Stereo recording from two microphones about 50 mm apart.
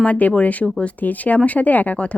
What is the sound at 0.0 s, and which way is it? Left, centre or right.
Speech, left.